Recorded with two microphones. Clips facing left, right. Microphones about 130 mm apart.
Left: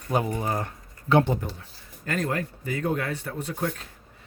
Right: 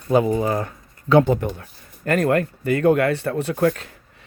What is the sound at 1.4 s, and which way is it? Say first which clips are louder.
Speech: right 9 dB; 55° right (ahead or behind).